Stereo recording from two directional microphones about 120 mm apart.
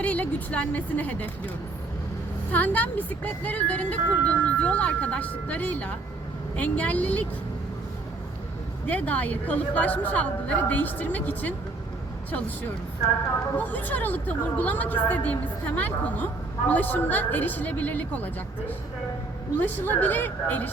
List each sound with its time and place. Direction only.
0.0 s speech: 10° left (ahead or behind)
2.5 s speech: 15° left (ahead or behind)
8.9 s speech: 15° left (ahead or behind)
13.6 s speech: 15° left (ahead or behind)
19.5 s speech: 15° left (ahead or behind)